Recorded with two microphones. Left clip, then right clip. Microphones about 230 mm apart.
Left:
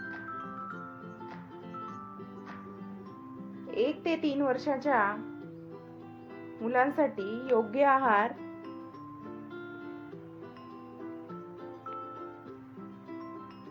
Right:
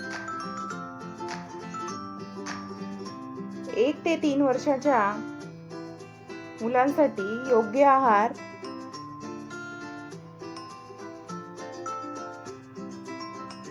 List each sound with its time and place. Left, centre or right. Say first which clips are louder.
3.7 s speech: right 5 dB; centre
6.6 s speech: right 5 dB; centre